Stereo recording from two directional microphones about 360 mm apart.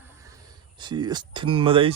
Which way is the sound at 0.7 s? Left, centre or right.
Centre.